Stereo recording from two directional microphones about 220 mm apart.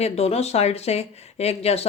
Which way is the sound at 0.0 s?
30° left (ahead or behind).